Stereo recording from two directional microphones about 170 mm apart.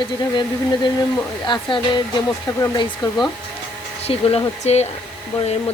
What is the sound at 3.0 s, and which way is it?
Speech, 25° left (ahead or behind).